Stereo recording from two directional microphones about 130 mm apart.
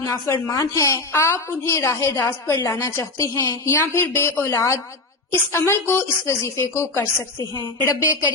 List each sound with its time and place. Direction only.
0.0 s a woman's voice: 25° left (ahead or behind)